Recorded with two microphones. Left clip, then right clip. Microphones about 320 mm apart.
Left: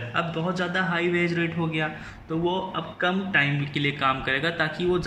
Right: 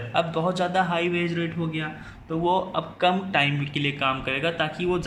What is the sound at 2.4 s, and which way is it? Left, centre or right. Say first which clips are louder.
A man's voice: right 4 dB; centre.